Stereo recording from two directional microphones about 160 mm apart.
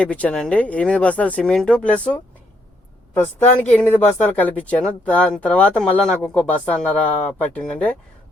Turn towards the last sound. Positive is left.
turn(degrees=10)  # may be behind; listen again after turning